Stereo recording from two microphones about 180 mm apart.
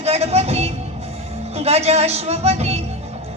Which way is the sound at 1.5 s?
35° right (ahead or behind).